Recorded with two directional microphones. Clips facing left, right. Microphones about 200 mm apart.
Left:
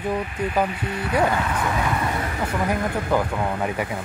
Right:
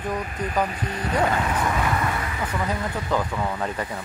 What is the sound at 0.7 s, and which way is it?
Speech, 40° right (ahead or behind).